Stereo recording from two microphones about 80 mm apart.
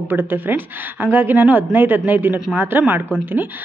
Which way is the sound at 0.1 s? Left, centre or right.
Right.